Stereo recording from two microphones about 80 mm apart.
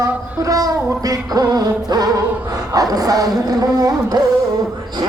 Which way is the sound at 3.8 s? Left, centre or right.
Right.